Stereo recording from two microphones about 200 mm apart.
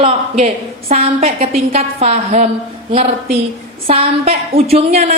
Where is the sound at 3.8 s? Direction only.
30° right (ahead or behind).